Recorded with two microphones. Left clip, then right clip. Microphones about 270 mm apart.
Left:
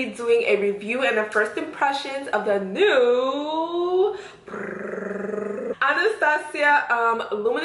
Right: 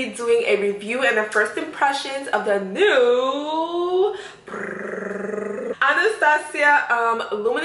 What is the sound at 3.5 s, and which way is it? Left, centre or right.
Speech, left.